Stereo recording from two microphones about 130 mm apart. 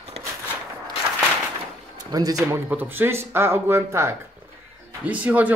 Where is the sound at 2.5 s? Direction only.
15° right (ahead or behind).